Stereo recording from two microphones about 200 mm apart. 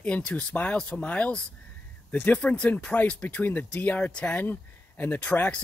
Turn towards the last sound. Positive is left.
turn(degrees=10)  # may be behind; listen again after turning